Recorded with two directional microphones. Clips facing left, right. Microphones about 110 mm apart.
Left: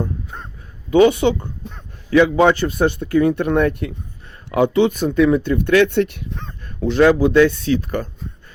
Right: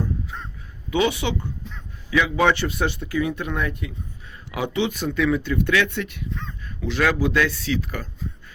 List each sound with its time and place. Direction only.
0.0 s crow: 45° left (ahead or behind)
0.9 s a sound: 45° left (ahead or behind)
2.5 s speech: 45° left (ahead or behind); by 3.9 s 60° left (ahead or behind)
4.5 s speech: 50° left (ahead or behind)
5.9 s speech: 55° left (ahead or behind)
7.3 s speech: 25° left (ahead or behind)
7.6 s speech: 45° left (ahead or behind)